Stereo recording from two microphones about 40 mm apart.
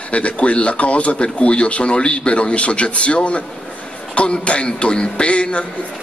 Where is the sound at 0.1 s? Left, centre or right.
Left.